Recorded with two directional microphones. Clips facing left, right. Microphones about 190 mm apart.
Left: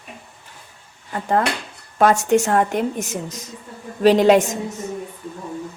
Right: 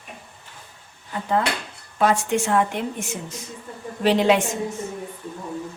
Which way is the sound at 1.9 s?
45° left (ahead or behind).